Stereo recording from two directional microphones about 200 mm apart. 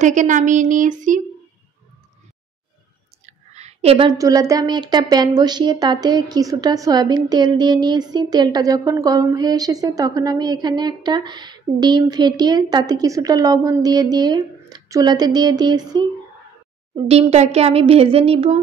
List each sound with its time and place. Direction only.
0.0 s speech: 40° right (ahead or behind)
3.3 s a sound: 35° right (ahead or behind)
4.2 s speech: 15° right (ahead or behind)